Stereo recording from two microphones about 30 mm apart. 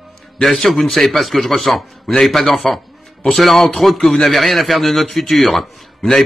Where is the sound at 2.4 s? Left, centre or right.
Left.